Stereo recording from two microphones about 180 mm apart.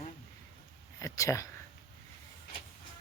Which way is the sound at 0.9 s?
15° left (ahead or behind).